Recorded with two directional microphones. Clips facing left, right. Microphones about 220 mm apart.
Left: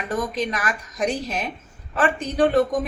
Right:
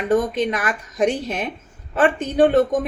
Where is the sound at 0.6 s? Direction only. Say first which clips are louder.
Right 5 dB; 25° right (ahead or behind).